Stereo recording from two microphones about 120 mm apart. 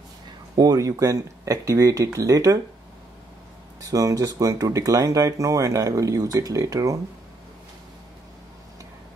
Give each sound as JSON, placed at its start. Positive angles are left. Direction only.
{"t": 0.6, "sound": "speech", "side_deg": -30}
{"t": 3.8, "sound": "speech", "side_deg": -30}